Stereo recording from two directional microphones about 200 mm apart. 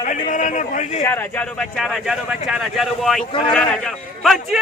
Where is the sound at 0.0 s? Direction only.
40° left (ahead or behind).